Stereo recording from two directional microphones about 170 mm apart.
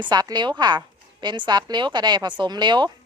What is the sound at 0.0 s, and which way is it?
A woman's voice, 25° right (ahead or behind).